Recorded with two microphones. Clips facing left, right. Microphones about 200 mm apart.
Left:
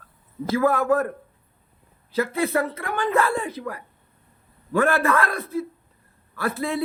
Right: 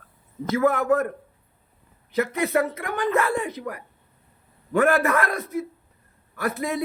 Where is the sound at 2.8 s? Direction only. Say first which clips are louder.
Even; 15° right (ahead or behind).